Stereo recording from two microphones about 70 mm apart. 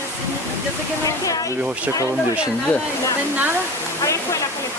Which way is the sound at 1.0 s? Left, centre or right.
Left.